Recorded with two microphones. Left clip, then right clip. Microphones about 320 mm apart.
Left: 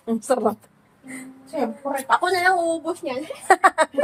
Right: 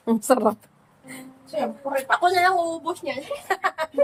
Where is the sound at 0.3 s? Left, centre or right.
Centre.